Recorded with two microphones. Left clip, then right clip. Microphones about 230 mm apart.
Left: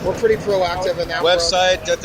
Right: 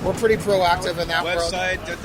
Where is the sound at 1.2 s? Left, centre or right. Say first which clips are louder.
Left 7 dB; centre.